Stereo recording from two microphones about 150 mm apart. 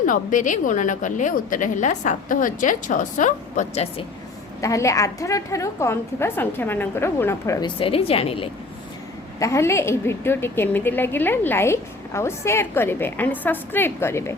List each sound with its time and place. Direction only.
0.0 s a woman's voice: 60° left (ahead or behind)
4.6 s a woman's voice: 20° left (ahead or behind)
7.8 s a woman's voice: 40° left (ahead or behind)
9.4 s a woman's voice: 20° left (ahead or behind)